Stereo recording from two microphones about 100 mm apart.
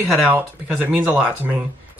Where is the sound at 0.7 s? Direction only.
10° right (ahead or behind).